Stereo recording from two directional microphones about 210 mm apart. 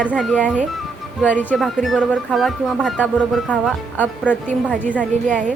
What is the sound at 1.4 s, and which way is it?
A woman's voice, 5° left (ahead or behind).